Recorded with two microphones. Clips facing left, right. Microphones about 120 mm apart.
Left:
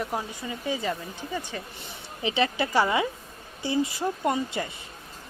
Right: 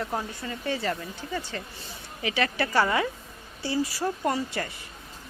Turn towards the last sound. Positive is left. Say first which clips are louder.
# left 1 dB
turn(degrees=20)  # may be behind; listen again after turning